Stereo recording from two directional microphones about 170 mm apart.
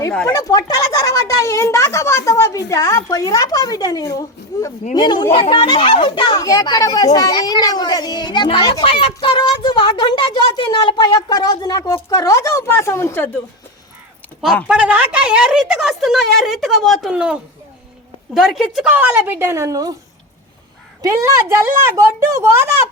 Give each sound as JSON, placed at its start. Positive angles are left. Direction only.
{"t": 0.3, "sound": "a child's voice", "side_deg": 20}
{"t": 14.4, "sound": "a woman's voice", "side_deg": -5}
{"t": 21.0, "sound": "a woman's voice", "side_deg": -20}